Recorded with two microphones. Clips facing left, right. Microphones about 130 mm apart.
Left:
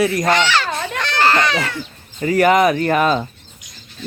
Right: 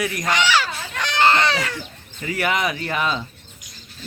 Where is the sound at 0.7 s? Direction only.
80° left.